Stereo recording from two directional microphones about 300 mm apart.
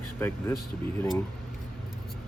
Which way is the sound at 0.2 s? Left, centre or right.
Centre.